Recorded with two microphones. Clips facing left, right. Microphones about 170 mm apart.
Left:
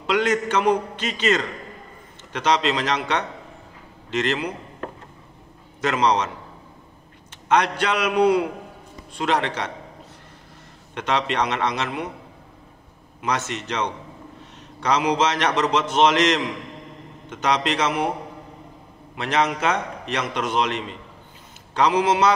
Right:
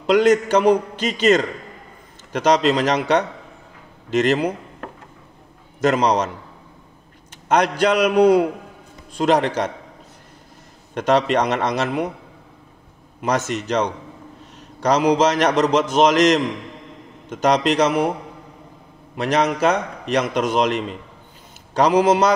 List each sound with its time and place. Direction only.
0.0 s a man's voice: 40° right (ahead or behind)
4.1 s a man's voice: 45° right (ahead or behind)
5.8 s a man's voice: 45° right (ahead or behind)
7.4 s a man's voice: 40° right (ahead or behind)
11.0 s a man's voice: 45° right (ahead or behind)
13.2 s a man's voice: 45° right (ahead or behind)
19.1 s a man's voice: 40° right (ahead or behind)
21.7 s a man's voice: 40° right (ahead or behind)